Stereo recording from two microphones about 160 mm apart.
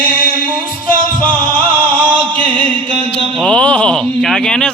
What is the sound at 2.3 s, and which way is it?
Music, 30° right (ahead or behind).